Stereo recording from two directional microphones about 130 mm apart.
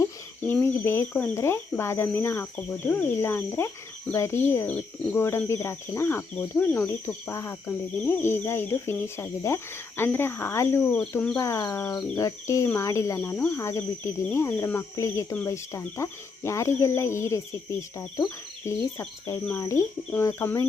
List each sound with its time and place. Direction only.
0.6 s speech: 20° left (ahead or behind)
10.9 s speech: 10° left (ahead or behind)
11.3 s speech: 20° left (ahead or behind)